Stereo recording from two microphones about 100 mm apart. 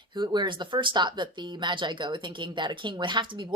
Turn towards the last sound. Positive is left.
turn(degrees=-50)  # may be behind; listen again after turning